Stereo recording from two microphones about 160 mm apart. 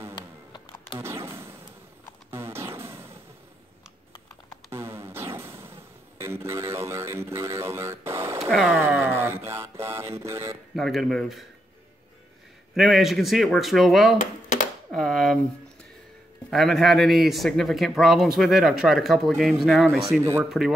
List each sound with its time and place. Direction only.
0.9 s a sound: 15° right (ahead or behind)
2.3 s music: 15° right (ahead or behind)
4.6 s music: 15° right (ahead or behind)
8.6 s a sound: 10° right (ahead or behind)
10.7 s speech: centre (ahead or behind)
12.7 s speech: centre (ahead or behind)
14.9 s a sound: centre (ahead or behind)
16.4 s speech: centre (ahead or behind)
20.2 s speech: 15° right (ahead or behind)
20.4 s speech: centre (ahead or behind)